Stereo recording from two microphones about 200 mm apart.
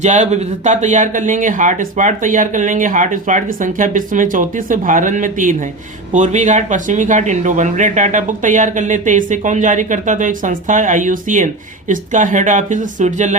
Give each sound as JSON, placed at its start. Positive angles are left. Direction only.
{"t": 0.0, "sound": "speech", "side_deg": -35}